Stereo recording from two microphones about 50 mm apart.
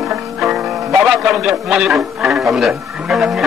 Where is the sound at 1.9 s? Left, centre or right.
Centre.